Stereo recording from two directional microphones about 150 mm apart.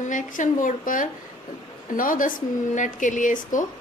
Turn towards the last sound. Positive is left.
turn(degrees=60)  # may be behind; listen again after turning